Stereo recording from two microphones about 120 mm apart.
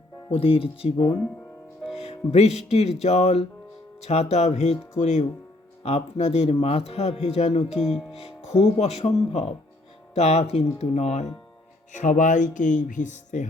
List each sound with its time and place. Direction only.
0.3 s speech: 50° left (ahead or behind)
2.0 s a man's voice: 60° left (ahead or behind)
5.8 s a man's voice: 55° left (ahead or behind)
7.7 s music: centre (ahead or behind)
8.2 s music: 65° left (ahead or behind)
8.8 s a man's voice: 65° left (ahead or behind)
11.9 s speech: 90° left